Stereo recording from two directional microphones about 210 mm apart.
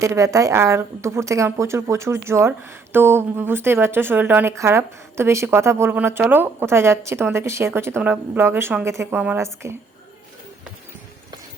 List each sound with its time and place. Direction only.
0.0 s speech: 15° right (ahead or behind)